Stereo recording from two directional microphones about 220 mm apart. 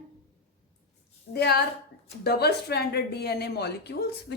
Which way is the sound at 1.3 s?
45° left (ahead or behind).